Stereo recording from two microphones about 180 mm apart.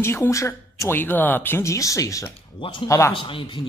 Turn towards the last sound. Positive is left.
turn(degrees=30)  # may be behind; listen again after turning